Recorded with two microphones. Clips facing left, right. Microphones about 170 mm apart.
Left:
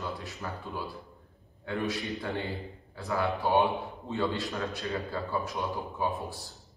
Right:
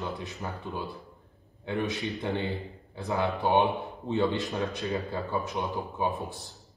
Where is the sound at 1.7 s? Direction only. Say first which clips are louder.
Right 2 dB; 20° right (ahead or behind).